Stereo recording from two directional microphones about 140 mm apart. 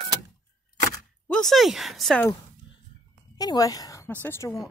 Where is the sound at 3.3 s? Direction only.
25° left (ahead or behind).